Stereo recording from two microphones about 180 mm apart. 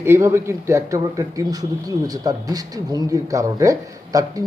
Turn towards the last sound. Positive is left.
turn(degrees=-20)  # may be behind; listen again after turning